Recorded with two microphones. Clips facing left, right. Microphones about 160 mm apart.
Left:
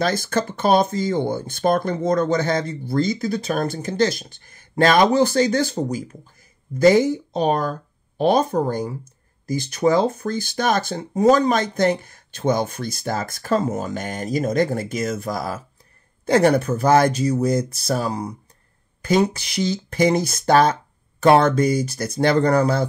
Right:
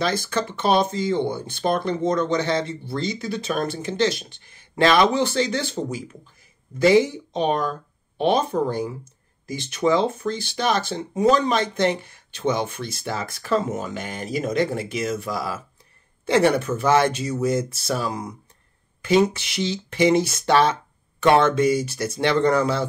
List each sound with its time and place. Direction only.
0.0 s speech: 45° left (ahead or behind)